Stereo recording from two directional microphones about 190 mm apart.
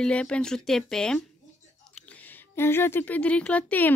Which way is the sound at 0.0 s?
5° left (ahead or behind).